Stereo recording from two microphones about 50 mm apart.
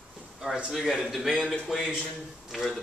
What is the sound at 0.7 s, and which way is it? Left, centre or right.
A man's voice, centre.